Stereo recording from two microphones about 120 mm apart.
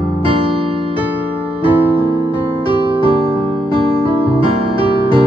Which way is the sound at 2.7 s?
45° right (ahead or behind).